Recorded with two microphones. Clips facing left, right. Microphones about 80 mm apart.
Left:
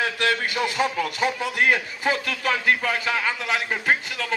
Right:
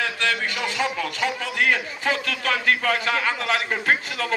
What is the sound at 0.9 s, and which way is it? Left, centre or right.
A man's voice, centre.